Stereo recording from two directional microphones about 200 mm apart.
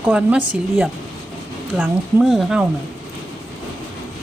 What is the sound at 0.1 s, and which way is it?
Speech, 5° right (ahead or behind).